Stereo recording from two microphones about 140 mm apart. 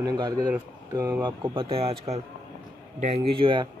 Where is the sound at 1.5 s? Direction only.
40° right (ahead or behind).